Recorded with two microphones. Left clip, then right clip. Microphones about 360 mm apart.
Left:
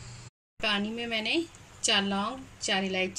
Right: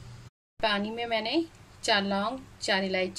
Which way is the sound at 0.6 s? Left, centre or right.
Right.